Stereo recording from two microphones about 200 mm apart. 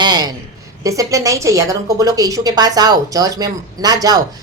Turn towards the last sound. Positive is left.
turn(degrees=-20)  # may be behind; listen again after turning